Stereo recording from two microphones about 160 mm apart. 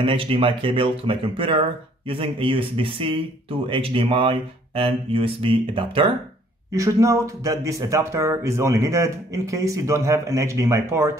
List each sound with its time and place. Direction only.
0.0 s speech: 35° right (ahead or behind)
6.7 s speech: 20° right (ahead or behind)